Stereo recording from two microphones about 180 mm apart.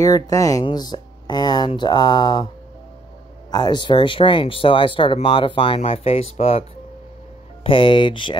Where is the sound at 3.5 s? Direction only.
25° left (ahead or behind).